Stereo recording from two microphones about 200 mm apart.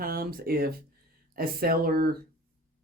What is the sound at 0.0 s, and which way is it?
Speech, 50° right (ahead or behind).